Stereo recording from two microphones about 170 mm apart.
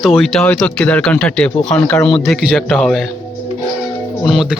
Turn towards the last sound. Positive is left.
turn(degrees=0)  # may be behind; listen again after turning